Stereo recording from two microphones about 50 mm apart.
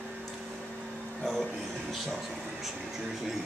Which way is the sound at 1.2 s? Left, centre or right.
Centre.